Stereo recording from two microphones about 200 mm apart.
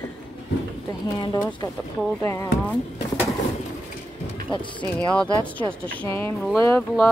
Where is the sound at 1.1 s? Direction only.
20° left (ahead or behind).